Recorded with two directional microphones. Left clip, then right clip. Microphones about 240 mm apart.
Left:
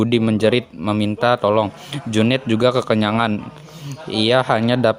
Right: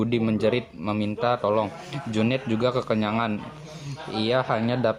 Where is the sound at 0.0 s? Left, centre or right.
Left.